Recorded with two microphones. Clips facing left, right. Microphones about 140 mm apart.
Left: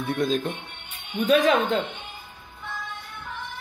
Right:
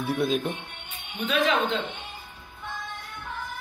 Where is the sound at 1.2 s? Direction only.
40° left (ahead or behind).